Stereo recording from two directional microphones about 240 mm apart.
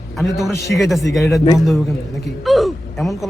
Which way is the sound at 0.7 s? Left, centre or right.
Centre.